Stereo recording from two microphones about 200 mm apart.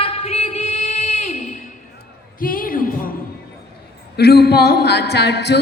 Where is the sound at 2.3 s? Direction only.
45° left (ahead or behind).